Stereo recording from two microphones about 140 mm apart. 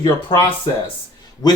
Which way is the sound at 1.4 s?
30° left (ahead or behind).